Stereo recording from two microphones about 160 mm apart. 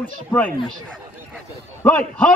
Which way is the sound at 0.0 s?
10° left (ahead or behind).